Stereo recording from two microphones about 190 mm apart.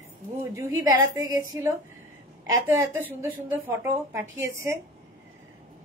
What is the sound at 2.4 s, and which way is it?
A woman's voice, 15° right (ahead or behind).